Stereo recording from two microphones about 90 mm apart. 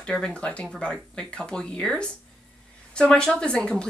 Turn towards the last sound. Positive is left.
turn(degrees=10)  # may be behind; listen again after turning